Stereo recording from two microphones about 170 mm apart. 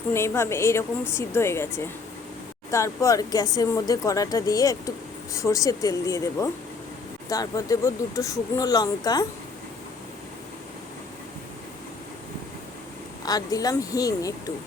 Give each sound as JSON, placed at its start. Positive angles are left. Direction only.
{"t": 0.1, "sound": "a woman's voice", "side_deg": 15}
{"t": 13.2, "sound": "speech", "side_deg": 20}